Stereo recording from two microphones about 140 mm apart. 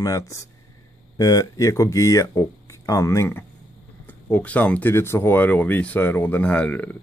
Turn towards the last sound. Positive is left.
turn(degrees=10)  # may be behind; listen again after turning